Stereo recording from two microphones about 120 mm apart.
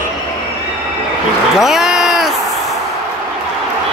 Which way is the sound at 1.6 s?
5° right (ahead or behind).